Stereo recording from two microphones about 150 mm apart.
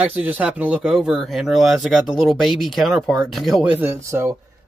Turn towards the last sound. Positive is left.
turn(degrees=-15)  # may be behind; listen again after turning